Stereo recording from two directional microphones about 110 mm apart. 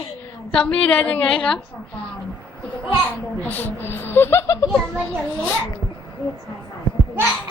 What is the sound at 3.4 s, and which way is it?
Speech, 15° left (ahead or behind).